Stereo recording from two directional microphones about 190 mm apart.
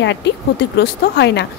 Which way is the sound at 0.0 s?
65° left (ahead or behind).